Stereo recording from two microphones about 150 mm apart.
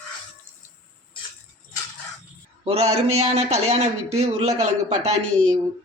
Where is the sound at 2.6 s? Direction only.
45° right (ahead or behind).